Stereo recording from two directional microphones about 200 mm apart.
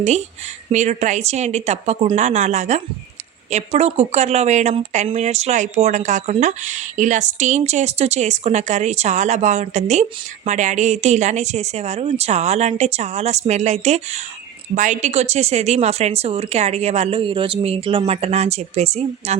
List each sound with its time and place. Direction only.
0.7 s speech: 35° right (ahead or behind)